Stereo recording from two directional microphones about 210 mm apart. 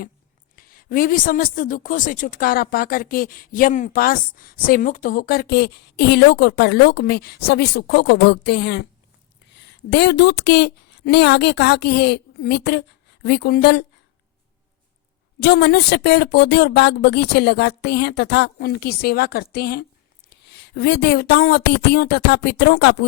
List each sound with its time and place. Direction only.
0.5 s a woman's voice: 45° left (ahead or behind)
15.4 s a woman's voice: 55° left (ahead or behind)